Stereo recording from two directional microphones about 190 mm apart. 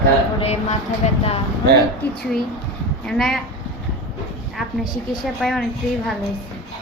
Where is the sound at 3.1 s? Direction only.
Centre (ahead or behind).